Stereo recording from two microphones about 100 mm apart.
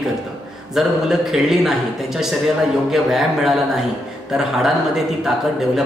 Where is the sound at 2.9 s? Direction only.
5° right (ahead or behind).